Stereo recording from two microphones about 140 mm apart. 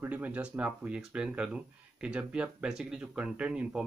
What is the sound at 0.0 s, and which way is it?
Speech, 10° right (ahead or behind).